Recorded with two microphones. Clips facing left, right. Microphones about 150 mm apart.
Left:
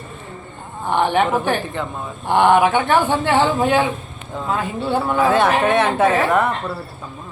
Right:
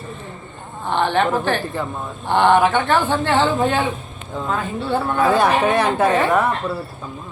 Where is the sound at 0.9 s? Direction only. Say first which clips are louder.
Left 1 dB; 10° left (ahead or behind).